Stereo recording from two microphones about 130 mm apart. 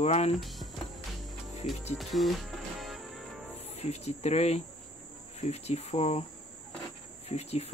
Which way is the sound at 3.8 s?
55° left (ahead or behind).